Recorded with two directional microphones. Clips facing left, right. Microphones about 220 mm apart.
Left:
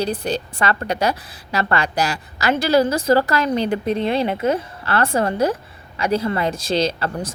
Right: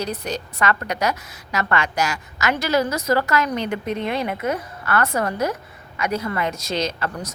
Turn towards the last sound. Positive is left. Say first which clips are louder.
# left 4 dB
turn(degrees=30)  # may be behind; listen again after turning